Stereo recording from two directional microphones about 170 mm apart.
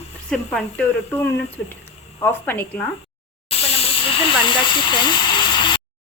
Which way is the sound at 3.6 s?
35° left (ahead or behind).